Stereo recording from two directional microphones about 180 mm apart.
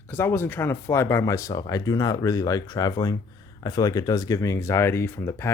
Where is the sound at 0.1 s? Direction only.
10° left (ahead or behind).